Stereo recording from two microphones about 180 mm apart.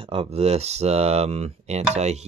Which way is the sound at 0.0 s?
30° right (ahead or behind).